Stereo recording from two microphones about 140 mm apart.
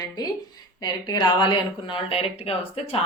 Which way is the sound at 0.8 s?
30° left (ahead or behind).